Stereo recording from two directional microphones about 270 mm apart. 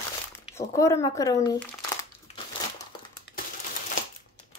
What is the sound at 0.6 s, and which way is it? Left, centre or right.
A woman's voice, centre.